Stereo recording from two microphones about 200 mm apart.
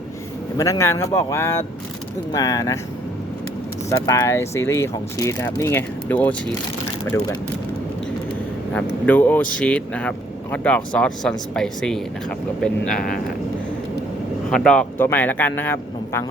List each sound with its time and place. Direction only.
0.5 s speech: 15° left (ahead or behind)
3.8 s speech: 15° left (ahead or behind)
8.7 s speech: 10° left (ahead or behind)
12.9 s speech: 45° left (ahead or behind)
14.5 s speech: 5° left (ahead or behind)